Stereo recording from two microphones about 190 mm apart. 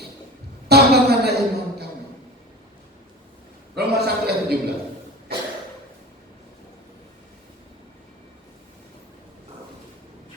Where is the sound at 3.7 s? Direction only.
60° right (ahead or behind).